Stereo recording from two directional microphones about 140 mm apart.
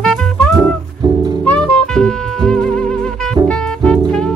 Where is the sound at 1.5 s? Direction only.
5° left (ahead or behind).